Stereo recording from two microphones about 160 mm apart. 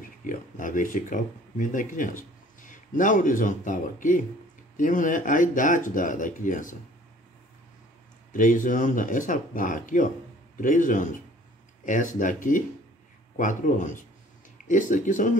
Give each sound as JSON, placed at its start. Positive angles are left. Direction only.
{"t": 0.2, "sound": "speech", "side_deg": 55}
{"t": 8.3, "sound": "speech", "side_deg": 55}